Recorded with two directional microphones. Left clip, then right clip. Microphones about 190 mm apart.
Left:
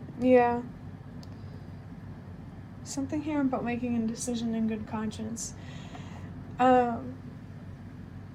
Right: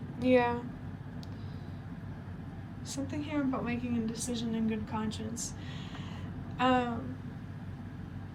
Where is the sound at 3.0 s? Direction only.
85° left.